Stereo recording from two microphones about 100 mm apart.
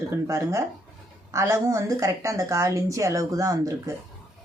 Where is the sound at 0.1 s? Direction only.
30° right (ahead or behind).